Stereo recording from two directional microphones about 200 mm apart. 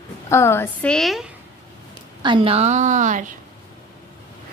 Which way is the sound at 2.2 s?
25° right (ahead or behind).